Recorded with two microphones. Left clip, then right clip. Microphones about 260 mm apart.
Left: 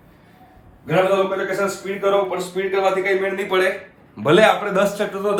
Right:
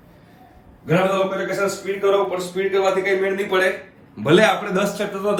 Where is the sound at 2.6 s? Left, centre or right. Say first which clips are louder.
Even; left.